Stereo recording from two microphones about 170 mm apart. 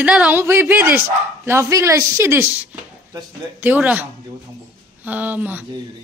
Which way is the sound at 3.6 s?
10° right (ahead or behind).